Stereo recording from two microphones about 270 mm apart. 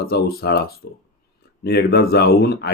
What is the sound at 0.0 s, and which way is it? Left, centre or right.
Speech, left.